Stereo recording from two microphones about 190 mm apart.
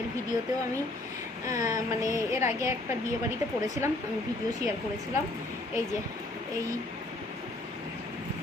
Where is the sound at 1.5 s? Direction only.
20° right (ahead or behind).